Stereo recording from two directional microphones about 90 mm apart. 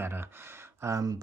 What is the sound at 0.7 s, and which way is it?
Speech, 35° right (ahead or behind).